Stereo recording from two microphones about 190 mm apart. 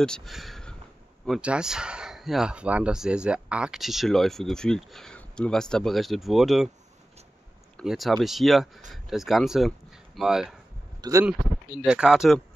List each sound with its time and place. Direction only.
0.0 s speech: 5° left (ahead or behind)
7.7 s speech: centre (ahead or behind)
11.0 s speech: 15° right (ahead or behind)
11.8 s speech: 5° right (ahead or behind)